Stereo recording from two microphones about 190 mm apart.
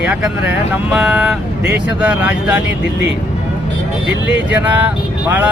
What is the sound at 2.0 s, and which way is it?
Vehicle, 5° right (ahead or behind).